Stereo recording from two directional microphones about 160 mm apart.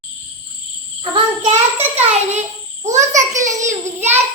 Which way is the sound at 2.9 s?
50° right (ahead or behind).